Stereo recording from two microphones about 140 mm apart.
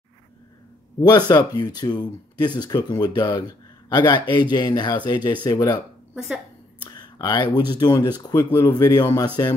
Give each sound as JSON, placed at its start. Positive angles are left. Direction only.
{"t": 1.0, "sound": "speech", "side_deg": 30}
{"t": 6.1, "sound": "a woman's voice", "side_deg": -5}
{"t": 6.8, "sound": "a man's voice", "side_deg": 30}